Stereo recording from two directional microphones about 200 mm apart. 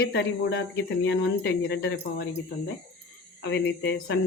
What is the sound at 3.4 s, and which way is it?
Speech, 60° left (ahead or behind).